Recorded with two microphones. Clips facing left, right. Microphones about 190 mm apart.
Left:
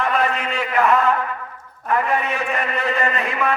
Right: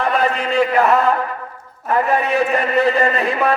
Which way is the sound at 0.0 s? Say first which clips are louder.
Right 3 dB; 35° right (ahead or behind).